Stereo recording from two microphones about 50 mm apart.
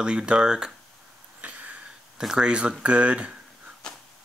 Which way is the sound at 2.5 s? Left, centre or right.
Centre.